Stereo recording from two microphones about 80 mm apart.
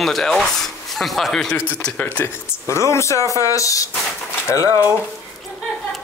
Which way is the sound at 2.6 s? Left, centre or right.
Left.